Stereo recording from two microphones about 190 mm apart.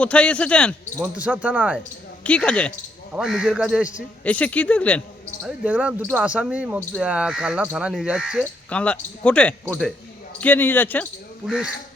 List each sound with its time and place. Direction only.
0.0 s speech: 5° left (ahead or behind)
1.1 s speech: 10° right (ahead or behind)
2.2 s speech: 5° left (ahead or behind)
4.2 s speech: 5° left (ahead or behind)
5.6 s speech: 10° right (ahead or behind); by 11.1 s 10° left (ahead or behind)
11.4 s speech: centre (ahead or behind)